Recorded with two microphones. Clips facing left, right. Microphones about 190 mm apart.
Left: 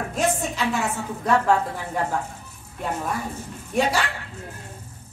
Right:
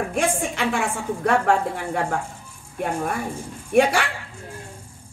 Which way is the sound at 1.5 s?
70° right (ahead or behind).